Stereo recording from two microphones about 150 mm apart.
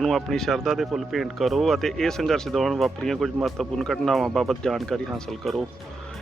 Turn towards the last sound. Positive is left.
turn(degrees=0)  # may be behind; listen again after turning